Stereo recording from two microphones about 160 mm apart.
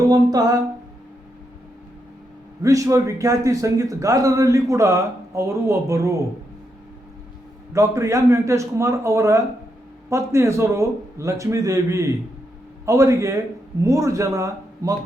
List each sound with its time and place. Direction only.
0.1 s a man's voice: 20° right (ahead or behind)
2.6 s a man's voice: 20° right (ahead or behind)
7.7 s a man's voice: 20° right (ahead or behind)